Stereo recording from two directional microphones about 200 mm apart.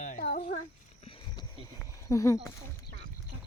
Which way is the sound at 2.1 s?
15° left (ahead or behind).